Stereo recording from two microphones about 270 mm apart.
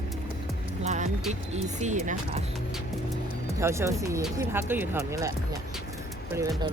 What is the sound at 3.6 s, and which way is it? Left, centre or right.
Speech, centre.